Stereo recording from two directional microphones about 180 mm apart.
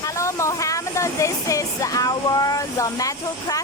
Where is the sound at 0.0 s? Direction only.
15° left (ahead or behind).